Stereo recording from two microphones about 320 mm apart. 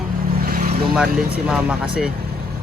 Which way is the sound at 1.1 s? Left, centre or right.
Centre.